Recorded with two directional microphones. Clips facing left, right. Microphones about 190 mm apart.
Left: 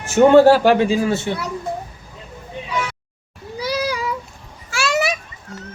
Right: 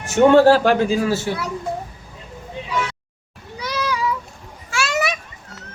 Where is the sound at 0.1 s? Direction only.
10° left (ahead or behind).